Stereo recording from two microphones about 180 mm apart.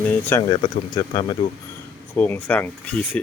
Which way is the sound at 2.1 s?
10° left (ahead or behind).